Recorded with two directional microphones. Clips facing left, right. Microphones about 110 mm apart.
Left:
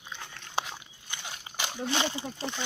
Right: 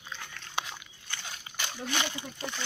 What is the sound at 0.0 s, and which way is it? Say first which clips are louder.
Dog: even; 20° left (ahead or behind).